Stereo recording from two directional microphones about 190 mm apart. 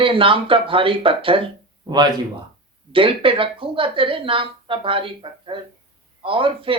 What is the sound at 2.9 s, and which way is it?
A woman's voice, 25° right (ahead or behind).